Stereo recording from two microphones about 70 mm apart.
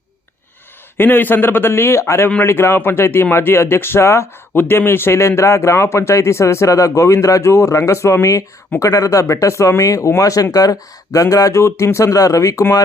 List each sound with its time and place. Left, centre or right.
0.9 s speech: left
4.5 s a man's voice: left